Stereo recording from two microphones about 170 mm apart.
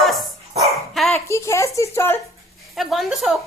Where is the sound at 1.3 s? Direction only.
15° left (ahead or behind).